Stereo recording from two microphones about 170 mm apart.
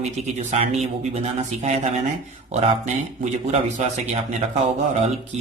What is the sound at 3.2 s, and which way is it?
A man's voice, 40° right (ahead or behind).